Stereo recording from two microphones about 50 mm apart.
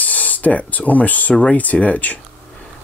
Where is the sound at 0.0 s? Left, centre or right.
Left.